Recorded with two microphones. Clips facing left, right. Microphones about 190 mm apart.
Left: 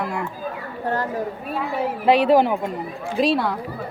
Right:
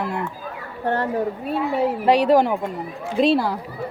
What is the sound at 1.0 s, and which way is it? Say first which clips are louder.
Speech: right 3 dB; 25° right (ahead or behind).